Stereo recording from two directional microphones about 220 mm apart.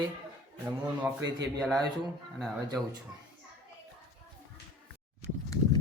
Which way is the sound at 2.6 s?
20° right (ahead or behind).